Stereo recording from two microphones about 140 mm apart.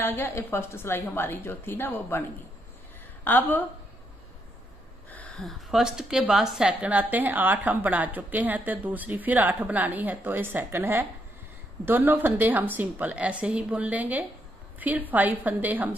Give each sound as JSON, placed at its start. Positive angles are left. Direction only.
{"t": 0.0, "sound": "a woman's voice", "side_deg": 15}
{"t": 3.3, "sound": "a woman's voice", "side_deg": 15}
{"t": 5.1, "sound": "a woman's voice", "side_deg": 5}